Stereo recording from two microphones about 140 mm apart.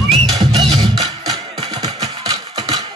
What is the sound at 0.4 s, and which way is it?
Music, 30° right (ahead or behind).